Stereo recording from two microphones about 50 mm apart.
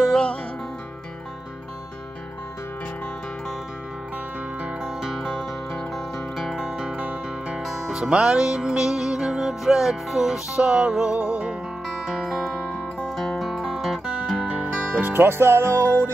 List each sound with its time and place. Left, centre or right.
4.8 s music: centre
7.0 s music: right
7.6 s music: centre
8.0 s music: right
12.1 s music: centre
13.0 s music: centre
13.7 s music: centre
14.4 s music: right
15.1 s music: right
15.8 s music: left